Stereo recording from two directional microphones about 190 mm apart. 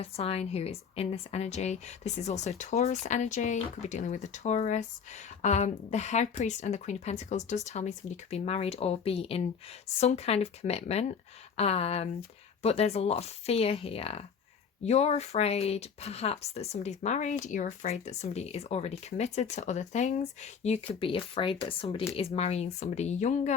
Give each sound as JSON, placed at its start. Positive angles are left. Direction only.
{"t": 0.0, "sound": "speech", "side_deg": 30}